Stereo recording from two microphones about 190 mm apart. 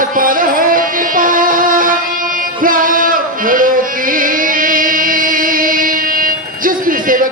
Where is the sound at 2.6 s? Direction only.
45° right (ahead or behind).